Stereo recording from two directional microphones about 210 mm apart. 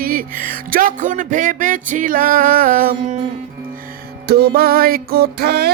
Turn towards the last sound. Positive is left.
turn(degrees=-50)  # may be behind; listen again after turning